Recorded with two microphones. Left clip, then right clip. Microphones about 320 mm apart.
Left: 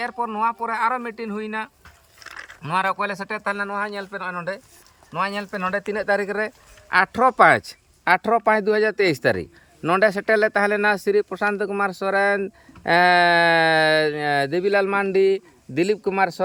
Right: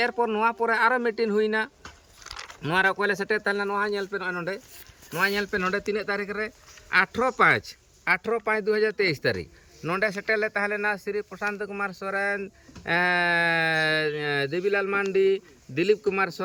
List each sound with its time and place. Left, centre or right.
0.0 s speech: centre